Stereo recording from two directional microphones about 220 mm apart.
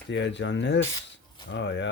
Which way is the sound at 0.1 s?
55° left (ahead or behind).